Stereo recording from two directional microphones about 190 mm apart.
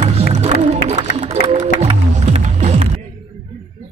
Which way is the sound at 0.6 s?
40° right (ahead or behind).